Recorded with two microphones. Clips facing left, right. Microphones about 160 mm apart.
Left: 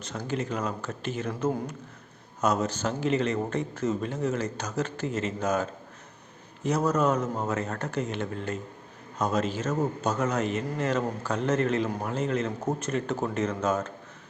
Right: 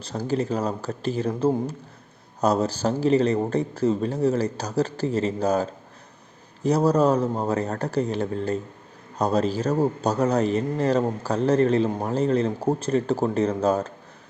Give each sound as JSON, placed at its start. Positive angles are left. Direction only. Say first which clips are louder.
{"t": 0.0, "sound": "a man's voice", "louder": "right 6 dB", "side_deg": -35}